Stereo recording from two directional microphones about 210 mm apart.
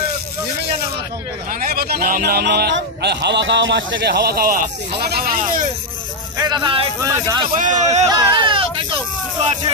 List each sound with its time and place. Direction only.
1.5 s a man's voice: 45° right (ahead or behind)
6.3 s a man's voice: 20° right (ahead or behind)
7.5 s a man's voice: 35° right (ahead or behind)
8.1 s a sound: 20° right (ahead or behind)